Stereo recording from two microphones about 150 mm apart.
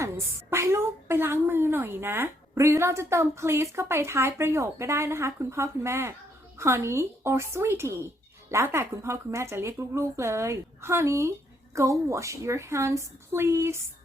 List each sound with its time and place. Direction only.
0.5 s a woman's voice: 20° right (ahead or behind)